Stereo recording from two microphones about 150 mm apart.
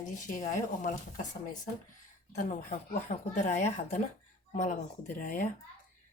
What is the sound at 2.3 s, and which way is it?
A woman's voice, 55° left (ahead or behind).